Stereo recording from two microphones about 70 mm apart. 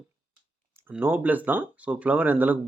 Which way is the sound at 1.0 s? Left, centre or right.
Right.